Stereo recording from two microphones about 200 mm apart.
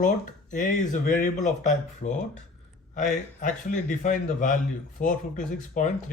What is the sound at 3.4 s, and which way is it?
Speech, 40° left (ahead or behind).